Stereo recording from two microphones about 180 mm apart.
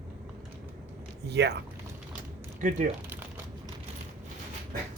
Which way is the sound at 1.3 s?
65° right (ahead or behind).